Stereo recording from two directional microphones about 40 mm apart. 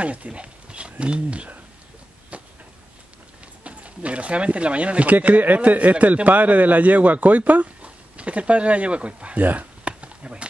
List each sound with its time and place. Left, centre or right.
0.0 s speech: right
2.3 s a sound: right
3.6 s speech: right
5.1 s a man's voice: right
7.8 s speech: right
9.4 s a man's voice: right
9.8 s a sound: right